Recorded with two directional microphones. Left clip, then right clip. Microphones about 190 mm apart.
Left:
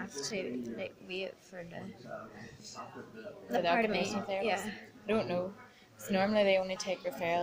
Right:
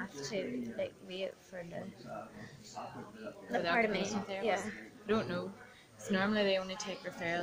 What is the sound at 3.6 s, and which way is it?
Speech, 10° left (ahead or behind).